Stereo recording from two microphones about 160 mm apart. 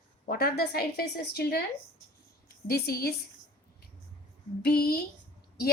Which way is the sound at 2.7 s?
75° left (ahead or behind).